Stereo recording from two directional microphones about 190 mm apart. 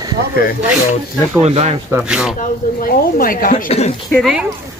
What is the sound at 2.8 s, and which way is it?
Speech, 50° left (ahead or behind).